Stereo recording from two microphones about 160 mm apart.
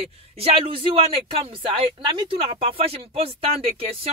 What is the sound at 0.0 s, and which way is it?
Speech, 40° right (ahead or behind).